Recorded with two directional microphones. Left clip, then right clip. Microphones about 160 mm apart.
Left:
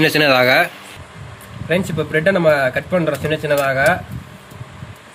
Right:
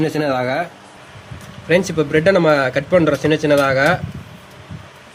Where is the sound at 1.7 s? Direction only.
50° right (ahead or behind).